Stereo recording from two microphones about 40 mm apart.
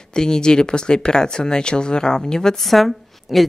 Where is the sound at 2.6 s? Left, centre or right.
Centre.